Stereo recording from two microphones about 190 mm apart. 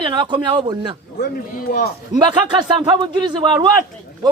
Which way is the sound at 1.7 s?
45° left (ahead or behind).